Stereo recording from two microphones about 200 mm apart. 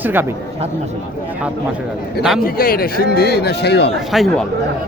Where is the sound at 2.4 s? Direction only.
45° left (ahead or behind).